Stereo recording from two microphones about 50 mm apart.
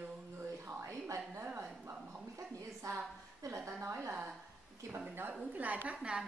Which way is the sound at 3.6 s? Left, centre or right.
Right.